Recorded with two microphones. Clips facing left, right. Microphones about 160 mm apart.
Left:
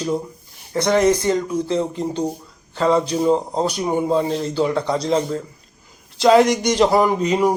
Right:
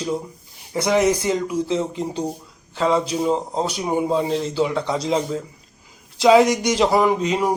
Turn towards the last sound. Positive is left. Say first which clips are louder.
# left 2 dB
turn(degrees=0)  # may be behind; listen again after turning